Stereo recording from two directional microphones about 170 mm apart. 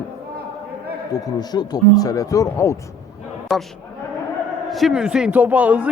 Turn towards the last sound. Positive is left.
turn(degrees=-10)  # may be behind; listen again after turning